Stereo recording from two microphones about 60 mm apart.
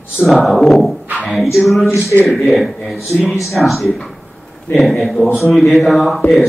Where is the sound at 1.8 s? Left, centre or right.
Left.